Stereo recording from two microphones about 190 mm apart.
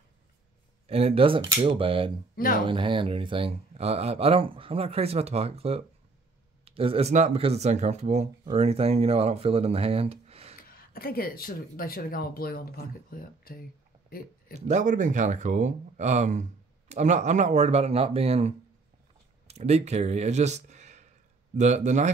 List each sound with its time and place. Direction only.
0.8 s speech: 30° right (ahead or behind)
2.3 s speech: 50° left (ahead or behind)
2.6 s speech: 25° right (ahead or behind)
11.0 s speech: 50° left (ahead or behind)
14.5 s speech: 40° right (ahead or behind)